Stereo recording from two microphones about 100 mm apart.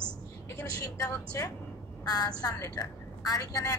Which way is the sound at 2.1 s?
40° left (ahead or behind).